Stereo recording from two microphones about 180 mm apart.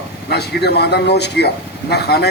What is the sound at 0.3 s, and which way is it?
A man's voice, 65° left (ahead or behind).